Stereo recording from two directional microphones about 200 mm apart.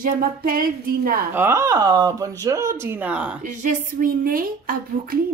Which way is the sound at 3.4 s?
40° right (ahead or behind).